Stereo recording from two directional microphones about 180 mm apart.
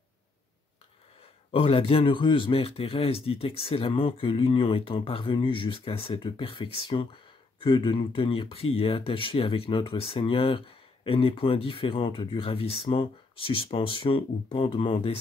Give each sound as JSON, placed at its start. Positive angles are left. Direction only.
{"t": 1.5, "sound": "speech", "side_deg": 30}